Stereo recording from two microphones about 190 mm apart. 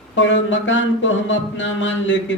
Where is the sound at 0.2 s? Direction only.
75° left (ahead or behind).